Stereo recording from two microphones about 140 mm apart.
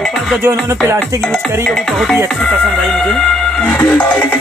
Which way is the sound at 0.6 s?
20° right (ahead or behind).